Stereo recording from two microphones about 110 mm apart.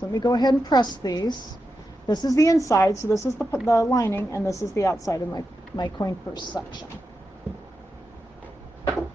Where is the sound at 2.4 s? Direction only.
30° left (ahead or behind).